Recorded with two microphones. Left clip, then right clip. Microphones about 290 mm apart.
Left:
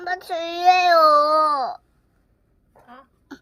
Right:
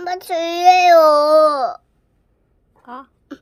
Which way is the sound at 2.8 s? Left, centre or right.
Centre.